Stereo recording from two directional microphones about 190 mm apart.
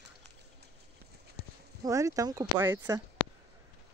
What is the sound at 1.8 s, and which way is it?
Speech, 15° right (ahead or behind).